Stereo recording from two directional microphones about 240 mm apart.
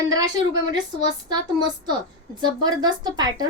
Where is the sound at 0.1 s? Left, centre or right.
Centre.